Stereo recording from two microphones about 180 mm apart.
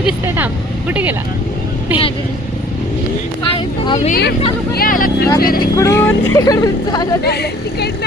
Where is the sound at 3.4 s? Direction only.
25° left (ahead or behind).